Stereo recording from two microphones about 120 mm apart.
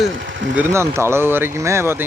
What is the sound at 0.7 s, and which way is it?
Speech, 20° right (ahead or behind).